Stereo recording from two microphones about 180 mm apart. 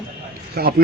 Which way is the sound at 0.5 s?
60° right (ahead or behind).